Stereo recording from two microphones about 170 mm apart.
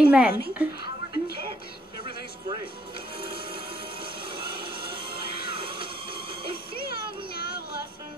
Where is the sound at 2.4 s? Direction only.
30° right (ahead or behind).